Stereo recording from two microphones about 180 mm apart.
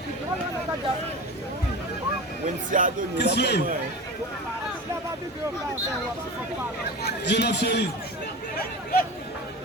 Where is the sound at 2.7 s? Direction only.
45° right (ahead or behind).